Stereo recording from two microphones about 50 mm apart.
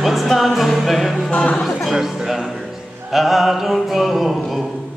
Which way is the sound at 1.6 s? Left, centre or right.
Centre.